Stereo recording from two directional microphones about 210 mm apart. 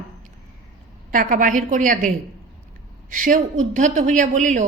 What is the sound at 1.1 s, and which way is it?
A woman's voice, 40° right (ahead or behind).